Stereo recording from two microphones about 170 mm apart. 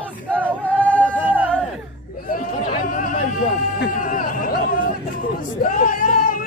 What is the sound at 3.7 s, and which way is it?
Chatter, 55° left (ahead or behind).